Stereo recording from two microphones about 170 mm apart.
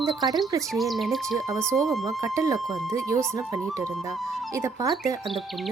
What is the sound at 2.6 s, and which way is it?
Speech, centre (ahead or behind).